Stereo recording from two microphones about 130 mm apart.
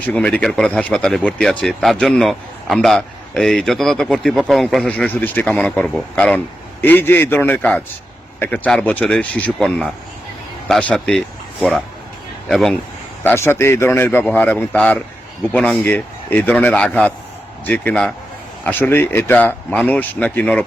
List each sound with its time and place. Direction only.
0.0 s speech: 10° left (ahead or behind)
12.5 s speech: centre (ahead or behind)
13.2 s speech: 20° left (ahead or behind)